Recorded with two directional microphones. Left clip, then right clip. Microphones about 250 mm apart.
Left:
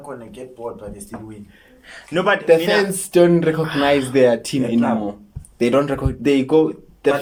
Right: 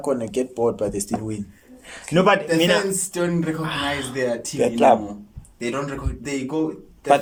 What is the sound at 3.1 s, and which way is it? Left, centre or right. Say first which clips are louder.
Speech: left 13 dB; left.